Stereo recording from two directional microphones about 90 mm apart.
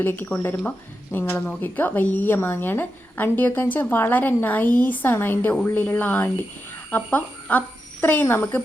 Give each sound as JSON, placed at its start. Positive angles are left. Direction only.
{"t": 0.0, "sound": "a woman's voice", "side_deg": 20}